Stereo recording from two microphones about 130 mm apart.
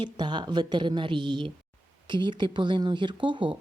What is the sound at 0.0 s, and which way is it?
Speech, 35° right (ahead or behind).